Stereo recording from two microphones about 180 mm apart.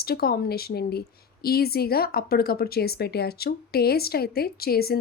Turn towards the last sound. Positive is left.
turn(degrees=60)  # may be behind; listen again after turning